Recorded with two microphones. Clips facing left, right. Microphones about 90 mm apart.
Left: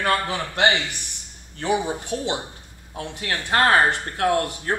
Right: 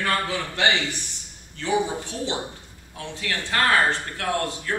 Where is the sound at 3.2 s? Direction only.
35° left (ahead or behind).